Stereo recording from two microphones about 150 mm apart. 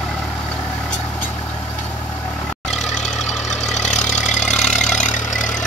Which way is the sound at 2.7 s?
50° left (ahead or behind).